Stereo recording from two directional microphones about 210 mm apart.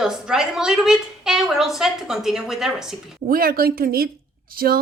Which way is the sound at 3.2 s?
45° right (ahead or behind).